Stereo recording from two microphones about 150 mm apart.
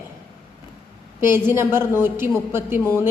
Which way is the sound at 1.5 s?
15° right (ahead or behind).